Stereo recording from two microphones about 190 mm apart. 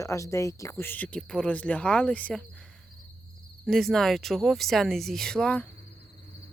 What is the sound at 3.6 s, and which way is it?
Speech, centre (ahead or behind).